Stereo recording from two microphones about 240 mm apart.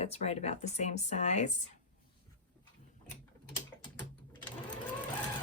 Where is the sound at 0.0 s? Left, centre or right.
Left.